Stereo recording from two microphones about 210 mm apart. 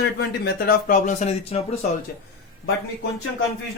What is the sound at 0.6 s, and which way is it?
Speech, 35° left (ahead or behind).